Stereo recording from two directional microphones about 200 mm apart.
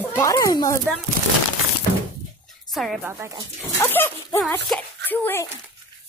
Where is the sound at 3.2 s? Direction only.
15° right (ahead or behind).